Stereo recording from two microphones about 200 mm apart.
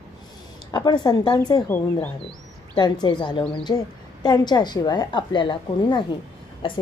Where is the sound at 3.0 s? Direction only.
20° left (ahead or behind).